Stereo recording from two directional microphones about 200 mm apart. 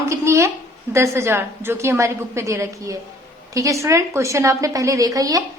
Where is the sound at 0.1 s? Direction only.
15° right (ahead or behind).